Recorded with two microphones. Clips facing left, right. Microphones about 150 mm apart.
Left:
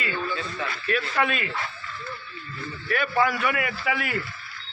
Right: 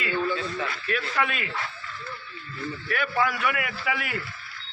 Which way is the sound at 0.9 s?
5° right (ahead or behind).